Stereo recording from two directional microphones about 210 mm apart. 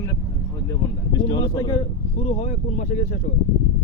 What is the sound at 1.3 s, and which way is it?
Speech, 20° left (ahead or behind).